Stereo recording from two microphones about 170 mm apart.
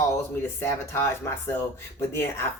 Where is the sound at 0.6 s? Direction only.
15° left (ahead or behind).